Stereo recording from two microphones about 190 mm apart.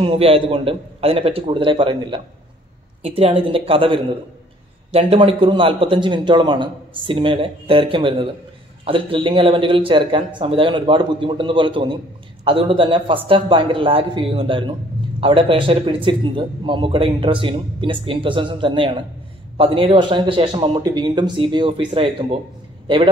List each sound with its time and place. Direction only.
0.0 s a man's voice: 30° right (ahead or behind)